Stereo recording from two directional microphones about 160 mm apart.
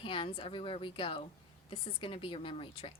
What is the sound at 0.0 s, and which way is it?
A woman's voice, 35° left (ahead or behind).